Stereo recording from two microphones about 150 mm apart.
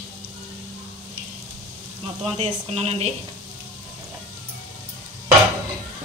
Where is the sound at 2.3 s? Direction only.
45° right (ahead or behind).